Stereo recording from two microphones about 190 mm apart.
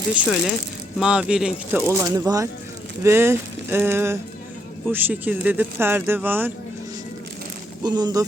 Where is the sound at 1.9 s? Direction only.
15° right (ahead or behind).